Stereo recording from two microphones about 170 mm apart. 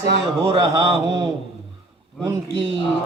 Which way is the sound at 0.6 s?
20° right (ahead or behind).